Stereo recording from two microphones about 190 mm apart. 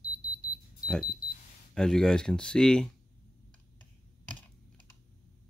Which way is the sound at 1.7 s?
5° left (ahead or behind).